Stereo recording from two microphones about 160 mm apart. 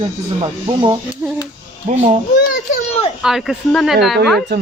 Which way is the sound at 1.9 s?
50° right (ahead or behind).